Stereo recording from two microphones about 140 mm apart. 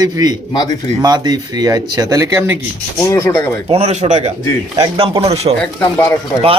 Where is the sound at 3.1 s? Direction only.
20° left (ahead or behind).